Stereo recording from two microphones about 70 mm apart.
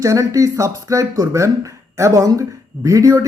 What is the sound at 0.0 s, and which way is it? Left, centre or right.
Speech, right.